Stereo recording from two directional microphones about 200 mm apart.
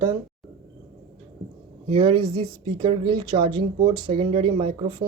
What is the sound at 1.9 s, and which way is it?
Speech, 25° right (ahead or behind).